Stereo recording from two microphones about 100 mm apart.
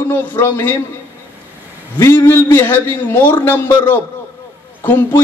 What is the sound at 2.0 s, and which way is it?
A man's voice, 25° left (ahead or behind).